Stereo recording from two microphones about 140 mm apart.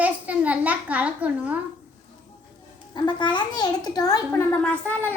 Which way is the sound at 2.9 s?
30° left (ahead or behind).